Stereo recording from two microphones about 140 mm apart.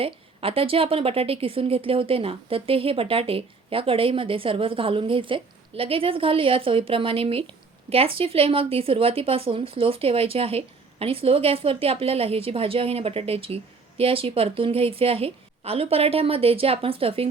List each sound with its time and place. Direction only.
0.0 s a woman's voice: 40° right (ahead or behind)